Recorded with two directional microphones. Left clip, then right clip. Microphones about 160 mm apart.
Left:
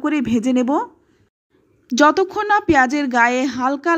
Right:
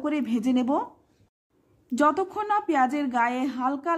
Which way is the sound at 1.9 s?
25° left (ahead or behind).